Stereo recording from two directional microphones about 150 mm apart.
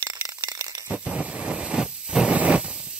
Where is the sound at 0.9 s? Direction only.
5° right (ahead or behind).